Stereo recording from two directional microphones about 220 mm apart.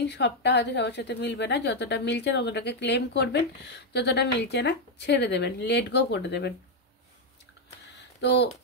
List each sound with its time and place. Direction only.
0.0 s a woman's voice: 50° left (ahead or behind)
8.2 s speech: 50° left (ahead or behind)